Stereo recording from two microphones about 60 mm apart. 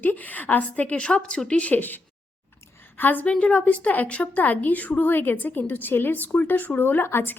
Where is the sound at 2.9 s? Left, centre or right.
Left.